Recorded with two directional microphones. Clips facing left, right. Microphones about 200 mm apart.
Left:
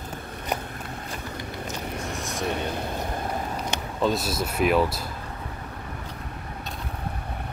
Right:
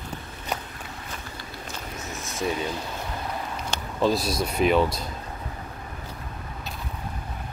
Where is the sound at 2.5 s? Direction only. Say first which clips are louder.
Even; 60° left (ahead or behind).